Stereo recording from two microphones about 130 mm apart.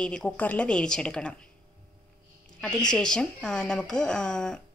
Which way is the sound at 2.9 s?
5° left (ahead or behind).